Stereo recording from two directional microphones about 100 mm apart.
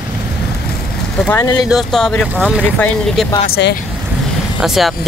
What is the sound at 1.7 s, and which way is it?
Speech, centre (ahead or behind).